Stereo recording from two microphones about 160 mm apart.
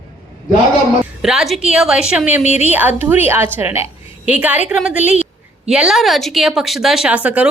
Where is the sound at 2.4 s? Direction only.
45° left (ahead or behind).